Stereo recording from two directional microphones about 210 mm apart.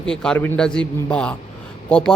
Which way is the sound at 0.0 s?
5° left (ahead or behind).